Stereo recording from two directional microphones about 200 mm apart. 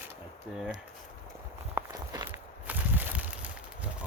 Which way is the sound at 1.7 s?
15° right (ahead or behind).